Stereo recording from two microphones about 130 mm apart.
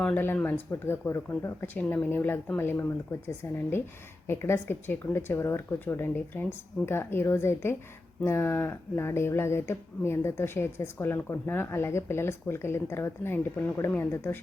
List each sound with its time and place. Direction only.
0.0 s speech: 15° left (ahead or behind)